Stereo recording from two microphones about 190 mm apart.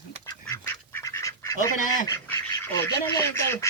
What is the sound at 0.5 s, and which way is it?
Duck, 15° left (ahead or behind).